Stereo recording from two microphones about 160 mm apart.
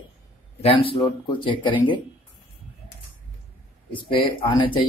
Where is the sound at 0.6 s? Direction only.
35° left (ahead or behind).